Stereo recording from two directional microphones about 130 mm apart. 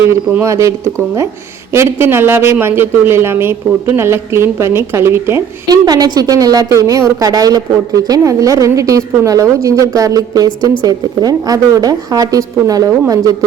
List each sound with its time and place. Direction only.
0.0 s speech: 20° right (ahead or behind)
5.6 s speech: 30° right (ahead or behind)